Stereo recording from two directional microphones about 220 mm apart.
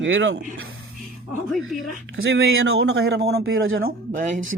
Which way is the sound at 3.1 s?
50° right (ahead or behind).